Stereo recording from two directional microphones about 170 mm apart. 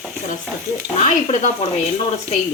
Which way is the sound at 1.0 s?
40° left (ahead or behind).